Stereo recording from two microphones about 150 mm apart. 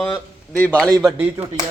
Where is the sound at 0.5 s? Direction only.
10° left (ahead or behind).